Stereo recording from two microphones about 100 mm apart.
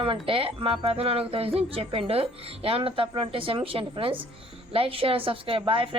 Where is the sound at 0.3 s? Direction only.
70° right (ahead or behind).